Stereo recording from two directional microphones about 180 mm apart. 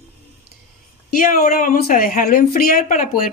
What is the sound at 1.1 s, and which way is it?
Speech, 50° left (ahead or behind).